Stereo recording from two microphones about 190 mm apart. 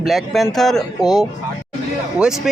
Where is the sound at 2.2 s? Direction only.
5° right (ahead or behind).